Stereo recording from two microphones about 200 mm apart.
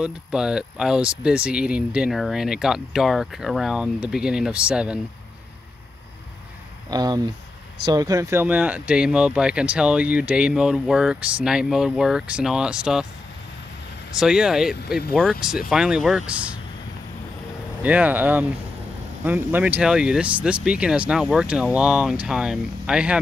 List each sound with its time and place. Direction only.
0.0 s speech: 5° right (ahead or behind)
6.9 s speech: 20° right (ahead or behind); by 13.0 s 5° right (ahead or behind)
14.2 s speech: 5° right (ahead or behind)
17.8 s speech: 5° right (ahead or behind)